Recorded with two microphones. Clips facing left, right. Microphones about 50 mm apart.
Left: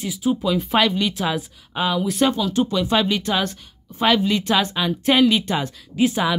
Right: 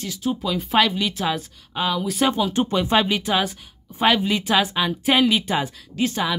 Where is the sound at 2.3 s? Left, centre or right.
Centre.